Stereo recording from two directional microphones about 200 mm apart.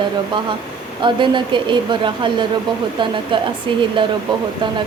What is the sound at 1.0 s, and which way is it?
A woman's voice, 25° right (ahead or behind).